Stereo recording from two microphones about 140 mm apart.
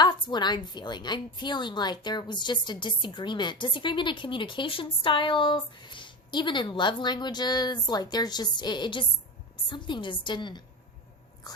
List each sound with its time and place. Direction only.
0.0 s a woman's voice: 30° left (ahead or behind)
11.5 s biting: 30° left (ahead or behind)